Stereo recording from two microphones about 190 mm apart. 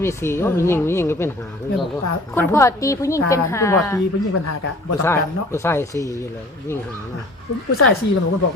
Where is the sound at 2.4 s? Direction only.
15° left (ahead or behind).